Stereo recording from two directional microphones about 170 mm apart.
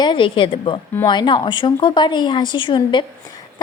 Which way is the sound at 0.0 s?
30° left (ahead or behind).